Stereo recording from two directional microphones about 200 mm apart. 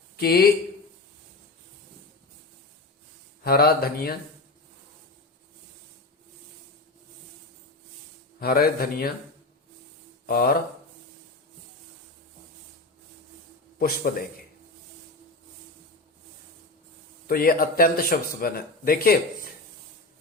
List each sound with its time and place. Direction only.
0.2 s speech: 50° left (ahead or behind)
3.4 s speech: 50° left (ahead or behind)
8.4 s speech: 50° left (ahead or behind)
10.2 s speech: 50° left (ahead or behind)
13.7 s speech: 50° left (ahead or behind)
17.2 s speech: 50° left (ahead or behind)